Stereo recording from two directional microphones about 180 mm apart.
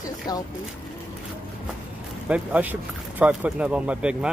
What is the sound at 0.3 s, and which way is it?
Speech, 20° left (ahead or behind).